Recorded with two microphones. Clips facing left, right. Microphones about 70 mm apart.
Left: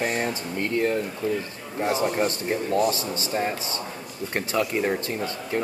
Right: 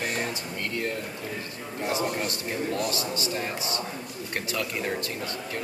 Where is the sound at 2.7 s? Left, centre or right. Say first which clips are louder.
Left 6 dB; left.